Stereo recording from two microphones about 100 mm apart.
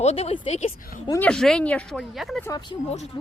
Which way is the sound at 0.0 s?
90° left.